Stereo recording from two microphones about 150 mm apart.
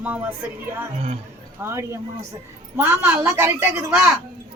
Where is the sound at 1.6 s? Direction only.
15° right (ahead or behind).